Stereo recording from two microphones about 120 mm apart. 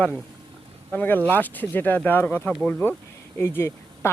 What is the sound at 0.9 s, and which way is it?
Speech, 15° left (ahead or behind).